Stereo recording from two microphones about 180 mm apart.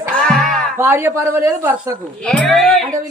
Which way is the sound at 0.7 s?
15° right (ahead or behind).